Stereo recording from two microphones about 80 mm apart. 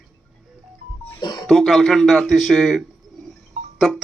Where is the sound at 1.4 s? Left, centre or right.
Centre.